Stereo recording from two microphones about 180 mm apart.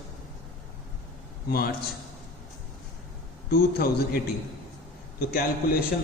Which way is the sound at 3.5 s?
60° left (ahead or behind).